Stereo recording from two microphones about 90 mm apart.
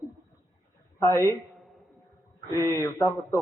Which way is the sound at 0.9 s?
30° left (ahead or behind).